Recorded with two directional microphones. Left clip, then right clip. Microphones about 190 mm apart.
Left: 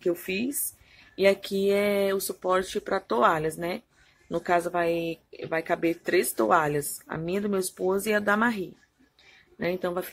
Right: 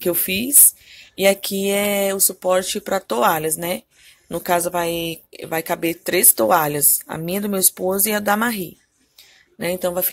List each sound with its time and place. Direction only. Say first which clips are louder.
0.0 s speech: right 6 dB; 30° right (ahead or behind)